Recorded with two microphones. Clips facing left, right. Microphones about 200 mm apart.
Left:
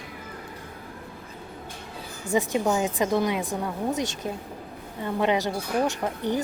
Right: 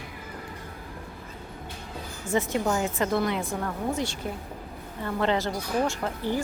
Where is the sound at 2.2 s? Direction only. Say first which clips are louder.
Left 2 dB; 15° left (ahead or behind).